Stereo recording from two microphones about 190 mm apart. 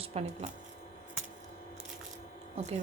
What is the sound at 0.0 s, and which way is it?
Speech, 35° right (ahead or behind).